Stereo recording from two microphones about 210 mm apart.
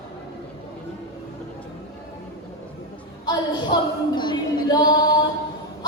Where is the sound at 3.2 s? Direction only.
20° left (ahead or behind).